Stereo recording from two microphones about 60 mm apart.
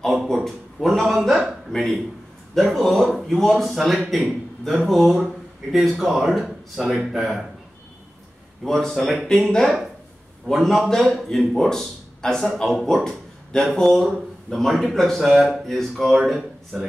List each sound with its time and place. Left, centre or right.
0.0 s a man's voice: centre
8.6 s speech: centre
11.2 s a man's voice: centre